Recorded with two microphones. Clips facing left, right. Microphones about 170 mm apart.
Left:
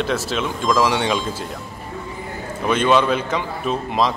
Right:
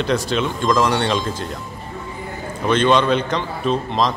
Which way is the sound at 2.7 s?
5° left (ahead or behind).